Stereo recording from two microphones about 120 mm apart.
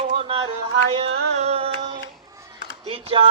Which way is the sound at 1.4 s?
60° right (ahead or behind).